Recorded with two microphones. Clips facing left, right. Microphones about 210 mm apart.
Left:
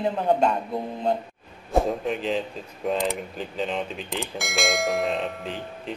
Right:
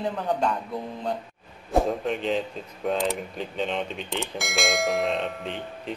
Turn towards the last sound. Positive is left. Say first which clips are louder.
# even
turn(degrees=0)  # may be behind; listen again after turning